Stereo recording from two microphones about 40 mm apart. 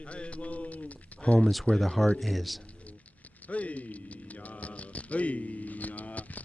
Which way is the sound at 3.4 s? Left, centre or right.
Left.